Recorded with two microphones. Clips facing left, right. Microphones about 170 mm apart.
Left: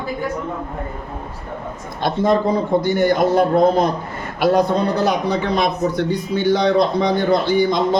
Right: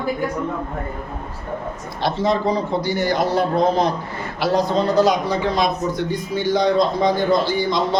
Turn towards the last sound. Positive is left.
turn(degrees=55)  # may be behind; listen again after turning